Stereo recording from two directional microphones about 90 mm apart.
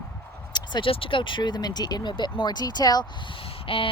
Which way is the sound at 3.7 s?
90° left.